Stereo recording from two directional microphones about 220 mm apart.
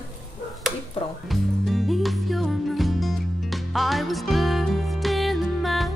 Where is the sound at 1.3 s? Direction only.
Centre (ahead or behind).